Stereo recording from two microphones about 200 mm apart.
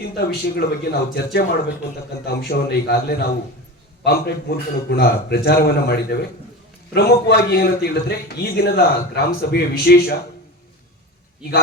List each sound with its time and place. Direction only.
0.3 s a man's voice: 55° left (ahead or behind)